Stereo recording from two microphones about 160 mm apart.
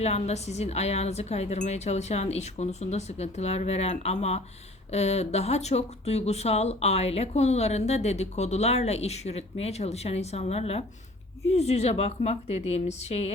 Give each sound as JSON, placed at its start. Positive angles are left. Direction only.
{"t": 0.0, "sound": "speech", "side_deg": 40}